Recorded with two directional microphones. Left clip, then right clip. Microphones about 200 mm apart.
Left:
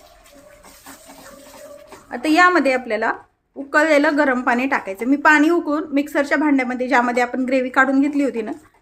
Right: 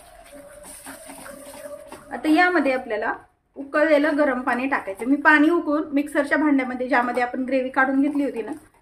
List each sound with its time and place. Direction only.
2.0 s a woman's voice: 25° left (ahead or behind)